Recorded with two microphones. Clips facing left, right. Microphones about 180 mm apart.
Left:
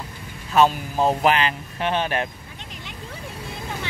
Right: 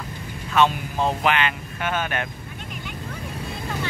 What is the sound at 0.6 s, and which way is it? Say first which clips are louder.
Speech: left 2 dB; 35° left (ahead or behind).